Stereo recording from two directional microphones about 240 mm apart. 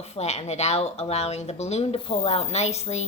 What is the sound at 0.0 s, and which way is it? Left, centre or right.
A woman's voice, left.